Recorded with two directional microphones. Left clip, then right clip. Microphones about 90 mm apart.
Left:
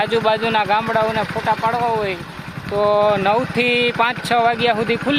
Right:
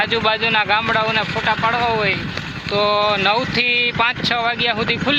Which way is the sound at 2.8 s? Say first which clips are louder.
Left 1 dB; 45° left (ahead or behind).